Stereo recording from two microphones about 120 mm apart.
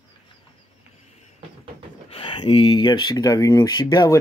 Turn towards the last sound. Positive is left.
turn(degrees=35)  # may be behind; listen again after turning